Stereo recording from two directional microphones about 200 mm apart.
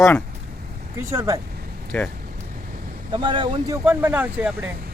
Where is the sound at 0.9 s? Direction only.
15° right (ahead or behind).